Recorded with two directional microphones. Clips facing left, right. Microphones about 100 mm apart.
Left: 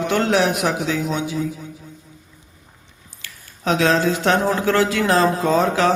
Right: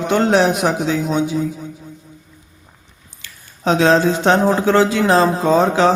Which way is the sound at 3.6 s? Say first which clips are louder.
Right 4 dB; 30° right (ahead or behind).